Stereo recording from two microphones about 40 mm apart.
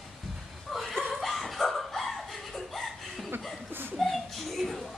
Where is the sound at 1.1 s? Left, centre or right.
Centre.